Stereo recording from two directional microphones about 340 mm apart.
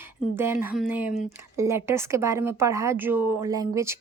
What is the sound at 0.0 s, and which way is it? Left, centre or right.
Speech, centre.